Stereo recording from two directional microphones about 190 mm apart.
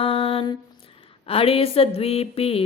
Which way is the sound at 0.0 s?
30° left (ahead or behind).